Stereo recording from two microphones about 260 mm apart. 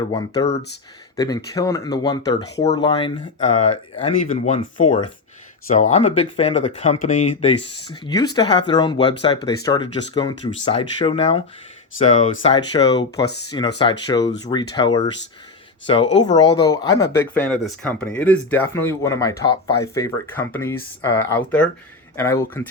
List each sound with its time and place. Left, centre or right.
0.1 s speech: centre
16.1 s speech: centre